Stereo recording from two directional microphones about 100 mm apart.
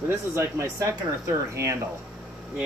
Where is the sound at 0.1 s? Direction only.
25° right (ahead or behind).